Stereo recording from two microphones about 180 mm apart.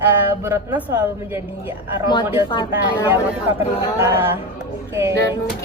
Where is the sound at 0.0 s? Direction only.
10° right (ahead or behind).